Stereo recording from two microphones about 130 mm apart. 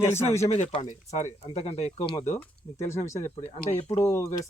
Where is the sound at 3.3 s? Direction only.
45° left (ahead or behind).